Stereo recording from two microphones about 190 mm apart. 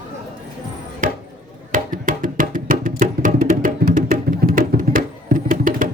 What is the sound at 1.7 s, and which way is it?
Music, 45° right (ahead or behind).